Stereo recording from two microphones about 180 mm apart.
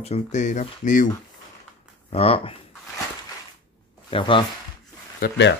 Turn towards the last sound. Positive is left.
turn(degrees=80)